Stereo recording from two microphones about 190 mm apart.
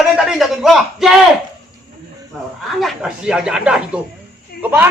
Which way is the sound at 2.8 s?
Centre (ahead or behind).